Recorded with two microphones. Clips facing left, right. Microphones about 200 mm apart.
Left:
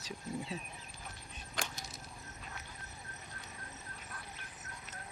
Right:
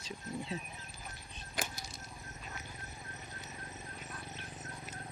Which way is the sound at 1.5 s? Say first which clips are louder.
Right 1 dB; 5° right (ahead or behind).